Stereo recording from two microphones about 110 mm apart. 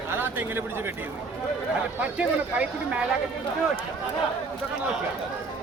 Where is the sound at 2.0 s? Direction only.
10° right (ahead or behind).